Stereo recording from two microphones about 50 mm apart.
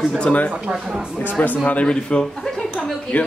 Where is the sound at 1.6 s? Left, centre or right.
Left.